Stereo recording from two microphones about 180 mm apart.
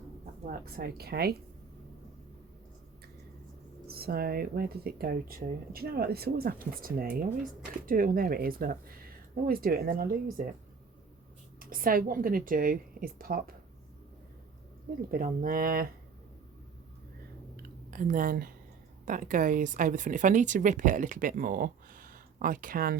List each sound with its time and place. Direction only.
0.4 s speech: 55° right (ahead or behind)
3.8 s speech: 60° right (ahead or behind)
11.6 s speech: 50° right (ahead or behind)
15.1 s speech: 50° right (ahead or behind)
17.6 s a sound: 50° right (ahead or behind)
19.0 s speech: 45° right (ahead or behind)